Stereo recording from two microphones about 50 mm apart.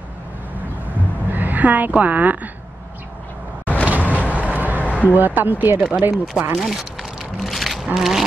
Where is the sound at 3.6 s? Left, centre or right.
Left.